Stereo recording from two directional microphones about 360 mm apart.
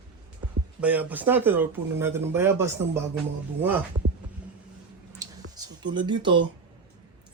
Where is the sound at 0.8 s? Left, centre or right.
Centre.